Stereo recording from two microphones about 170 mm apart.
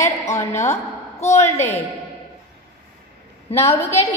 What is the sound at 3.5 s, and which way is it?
Speech, 35° left (ahead or behind).